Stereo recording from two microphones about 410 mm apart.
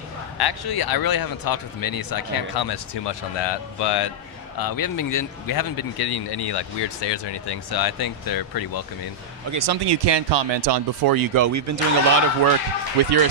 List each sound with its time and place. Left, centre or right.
0.4 s a man's voice: left
4.6 s a man's voice: left
9.5 s speech: right
13.0 s speech: right